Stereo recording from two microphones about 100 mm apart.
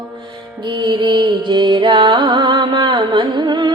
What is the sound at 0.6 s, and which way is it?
Music, 50° right (ahead or behind).